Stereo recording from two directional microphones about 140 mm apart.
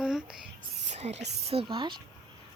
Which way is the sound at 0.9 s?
50° right (ahead or behind).